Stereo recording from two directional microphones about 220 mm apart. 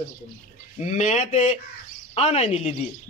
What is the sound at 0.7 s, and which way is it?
Speech, 30° left (ahead or behind).